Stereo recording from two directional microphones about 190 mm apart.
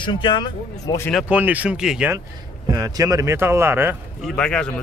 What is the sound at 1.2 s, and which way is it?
Speech, 10° right (ahead or behind).